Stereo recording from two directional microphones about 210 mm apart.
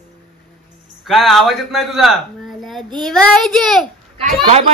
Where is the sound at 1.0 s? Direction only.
Centre (ahead or behind).